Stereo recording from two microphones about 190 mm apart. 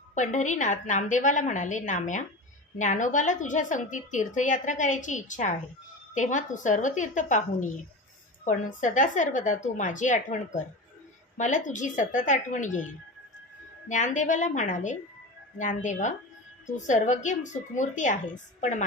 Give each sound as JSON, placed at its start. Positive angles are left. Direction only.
{"t": 0.1, "sound": "a woman's voice", "side_deg": 40}
{"t": 13.8, "sound": "a woman's voice", "side_deg": 40}